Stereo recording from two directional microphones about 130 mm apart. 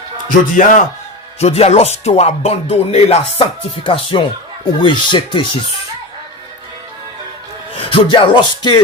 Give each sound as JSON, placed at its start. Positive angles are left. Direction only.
{"t": 0.3, "sound": "speech", "side_deg": 85}
{"t": 1.4, "sound": "speech", "side_deg": 55}
{"t": 7.9, "sound": "speech", "side_deg": 40}